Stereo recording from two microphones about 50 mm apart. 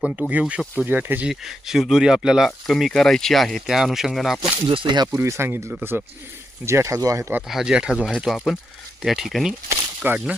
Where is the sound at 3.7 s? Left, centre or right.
Centre.